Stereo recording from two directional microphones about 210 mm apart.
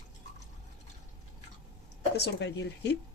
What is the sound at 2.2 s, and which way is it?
Speech, 55° left (ahead or behind).